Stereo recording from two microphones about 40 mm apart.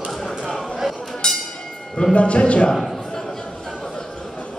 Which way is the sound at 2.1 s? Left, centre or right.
Left.